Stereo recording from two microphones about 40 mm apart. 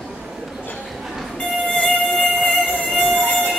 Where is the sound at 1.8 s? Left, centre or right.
Left.